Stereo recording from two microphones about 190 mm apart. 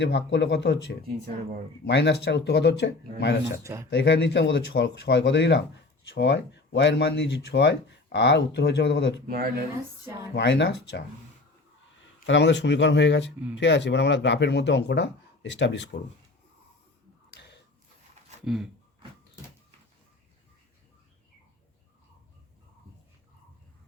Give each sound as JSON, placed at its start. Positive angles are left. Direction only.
{"t": 0.0, "sound": "speech", "side_deg": 65}
{"t": 1.9, "sound": "speech", "side_deg": 65}
{"t": 3.6, "sound": "speech", "side_deg": -15}
{"t": 3.8, "sound": "speech", "side_deg": 65}
{"t": 9.2, "sound": "speech", "side_deg": -50}
{"t": 10.3, "sound": "speech", "side_deg": 65}
{"t": 12.2, "sound": "speech", "side_deg": 70}
{"t": 18.4, "sound": "speech", "side_deg": 0}